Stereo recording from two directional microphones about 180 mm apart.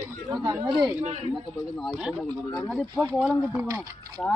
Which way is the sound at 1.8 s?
5° right (ahead or behind).